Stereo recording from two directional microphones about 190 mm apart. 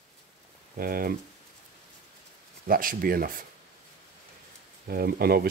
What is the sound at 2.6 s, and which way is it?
Speech, 45° right (ahead or behind).